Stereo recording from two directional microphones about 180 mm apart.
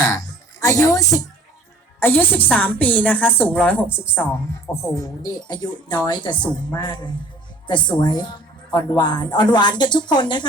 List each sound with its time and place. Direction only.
0.6 s a woman's voice: 20° left (ahead or behind)